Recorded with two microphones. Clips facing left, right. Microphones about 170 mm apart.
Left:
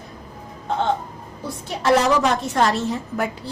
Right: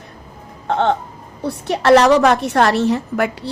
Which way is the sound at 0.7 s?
70° right (ahead or behind).